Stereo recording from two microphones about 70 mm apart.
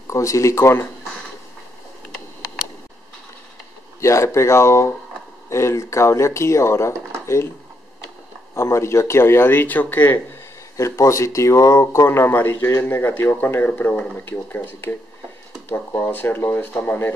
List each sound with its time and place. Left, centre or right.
0.1 s speech: left
4.0 s speech: left
8.5 s speech: left
10.8 s speech: left
16.1 s speech: left